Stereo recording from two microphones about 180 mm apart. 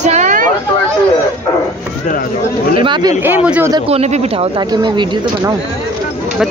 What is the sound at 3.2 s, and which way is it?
Speech, 10° right (ahead or behind).